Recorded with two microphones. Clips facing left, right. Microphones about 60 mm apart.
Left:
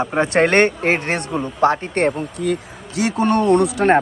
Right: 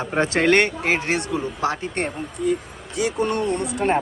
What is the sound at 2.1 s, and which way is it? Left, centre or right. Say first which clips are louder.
Speech: left 2 dB; left.